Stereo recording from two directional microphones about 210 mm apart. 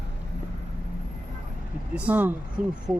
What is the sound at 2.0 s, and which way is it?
Speech, 5° right (ahead or behind).